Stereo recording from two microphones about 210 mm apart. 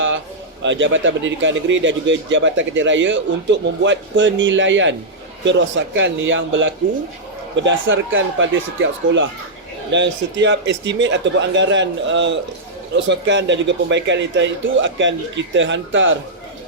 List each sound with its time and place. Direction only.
0.6 s speech: 60° right (ahead or behind)